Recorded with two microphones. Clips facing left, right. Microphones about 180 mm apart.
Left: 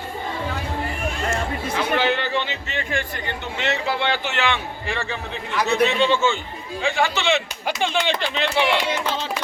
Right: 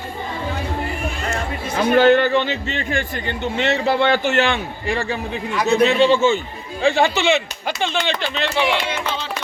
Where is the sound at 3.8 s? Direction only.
50° right (ahead or behind); by 7.1 s 30° right (ahead or behind).